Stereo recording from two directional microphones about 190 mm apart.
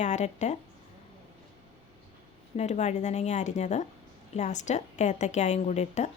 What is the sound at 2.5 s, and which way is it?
Speech, 35° left (ahead or behind).